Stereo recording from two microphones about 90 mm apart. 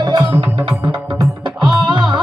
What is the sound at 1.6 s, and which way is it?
Music, 60° right (ahead or behind).